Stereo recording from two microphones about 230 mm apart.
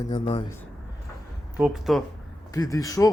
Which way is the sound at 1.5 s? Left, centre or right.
Centre.